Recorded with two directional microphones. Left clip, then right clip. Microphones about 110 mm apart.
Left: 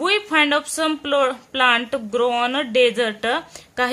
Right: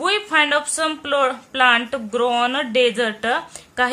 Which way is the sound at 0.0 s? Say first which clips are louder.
Even; 25° left (ahead or behind).